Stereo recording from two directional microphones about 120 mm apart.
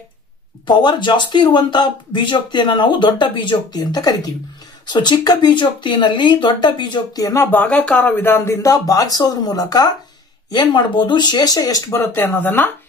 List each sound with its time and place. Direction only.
0.7 s speech: 40° left (ahead or behind)
7.3 s speech: 15° left (ahead or behind)